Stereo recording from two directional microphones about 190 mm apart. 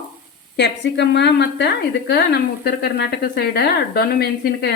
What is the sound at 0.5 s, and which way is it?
Speech, 65° left (ahead or behind).